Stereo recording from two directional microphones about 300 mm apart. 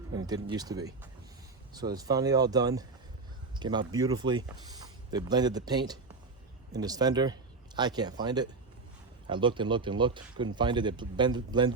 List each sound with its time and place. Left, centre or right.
0.4 s a man's voice: centre